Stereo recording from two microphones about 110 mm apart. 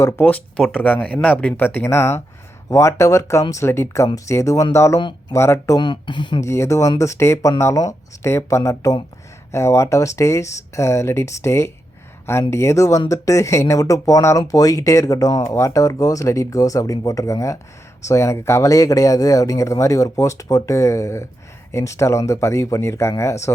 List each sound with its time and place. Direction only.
0.0 s speech: 15° left (ahead or behind)
5.8 s speech: 45° left (ahead or behind)
6.4 s speech: 25° left (ahead or behind)